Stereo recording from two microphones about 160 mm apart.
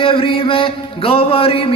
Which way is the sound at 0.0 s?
35° left (ahead or behind).